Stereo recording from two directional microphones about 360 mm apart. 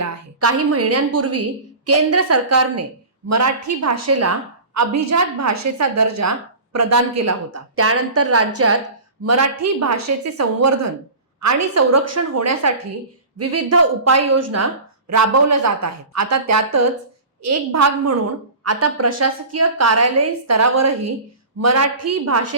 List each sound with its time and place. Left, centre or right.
0.0 s a woman's voice: right